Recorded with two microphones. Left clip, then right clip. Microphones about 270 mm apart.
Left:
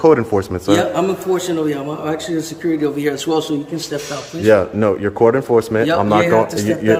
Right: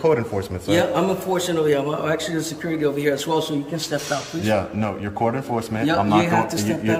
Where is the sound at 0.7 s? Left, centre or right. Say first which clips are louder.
Left 1 dB; centre.